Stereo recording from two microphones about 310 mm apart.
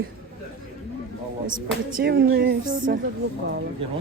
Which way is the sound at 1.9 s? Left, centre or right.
Right.